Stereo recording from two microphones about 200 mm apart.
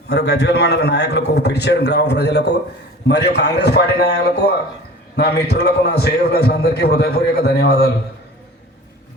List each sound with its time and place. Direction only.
0.1 s a man's voice: 55° left (ahead or behind)